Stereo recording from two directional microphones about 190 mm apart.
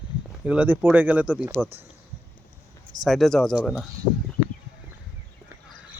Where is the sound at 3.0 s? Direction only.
Centre (ahead or behind).